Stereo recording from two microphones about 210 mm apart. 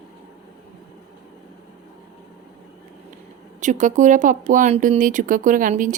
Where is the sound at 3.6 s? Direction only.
35° right (ahead or behind).